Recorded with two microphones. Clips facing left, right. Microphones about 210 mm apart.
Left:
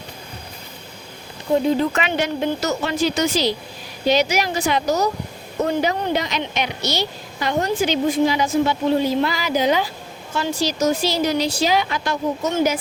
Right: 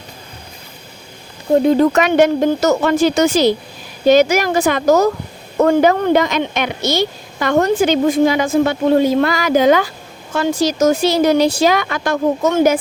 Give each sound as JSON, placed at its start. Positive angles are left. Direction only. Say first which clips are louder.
{"t": 1.5, "sound": "a woman's voice", "louder": "right 7 dB", "side_deg": -45}